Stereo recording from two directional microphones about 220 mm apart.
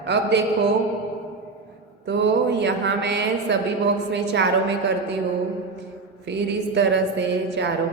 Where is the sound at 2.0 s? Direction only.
55° right (ahead or behind).